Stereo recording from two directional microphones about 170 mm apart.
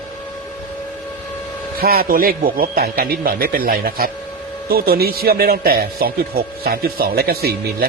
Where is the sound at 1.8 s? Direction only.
60° right (ahead or behind).